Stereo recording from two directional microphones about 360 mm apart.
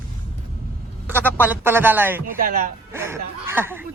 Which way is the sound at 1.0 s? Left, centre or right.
Centre.